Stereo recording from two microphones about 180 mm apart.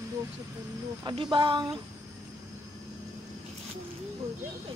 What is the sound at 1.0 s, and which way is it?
Speech, 25° right (ahead or behind).